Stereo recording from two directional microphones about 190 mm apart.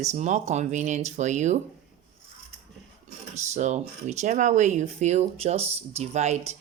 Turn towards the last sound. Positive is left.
turn(degrees=-35)  # may be behind; listen again after turning